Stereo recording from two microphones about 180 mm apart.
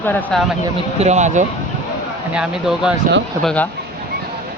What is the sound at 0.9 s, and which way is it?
Speech, 40° right (ahead or behind).